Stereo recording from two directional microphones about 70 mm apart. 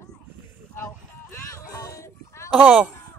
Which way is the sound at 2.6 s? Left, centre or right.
Right.